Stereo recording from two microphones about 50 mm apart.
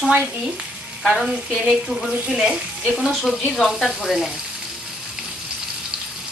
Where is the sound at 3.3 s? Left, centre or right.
Centre.